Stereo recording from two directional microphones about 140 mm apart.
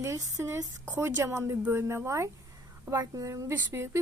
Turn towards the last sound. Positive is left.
turn(degrees=-20)  # may be behind; listen again after turning